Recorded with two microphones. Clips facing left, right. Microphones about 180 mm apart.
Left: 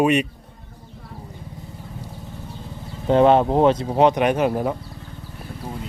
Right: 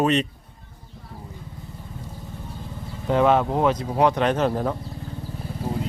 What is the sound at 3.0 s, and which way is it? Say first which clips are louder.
Speech: left 4 dB; 30° left (ahead or behind).